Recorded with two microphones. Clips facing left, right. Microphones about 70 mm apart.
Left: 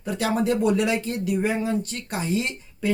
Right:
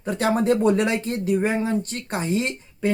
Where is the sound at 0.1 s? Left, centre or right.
Right.